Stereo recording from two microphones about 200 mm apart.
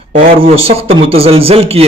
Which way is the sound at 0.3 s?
30° right (ahead or behind).